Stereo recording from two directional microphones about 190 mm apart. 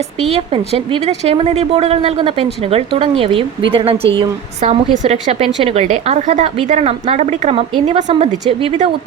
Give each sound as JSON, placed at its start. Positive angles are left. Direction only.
{"t": 0.3, "sound": "a woman's voice", "side_deg": -30}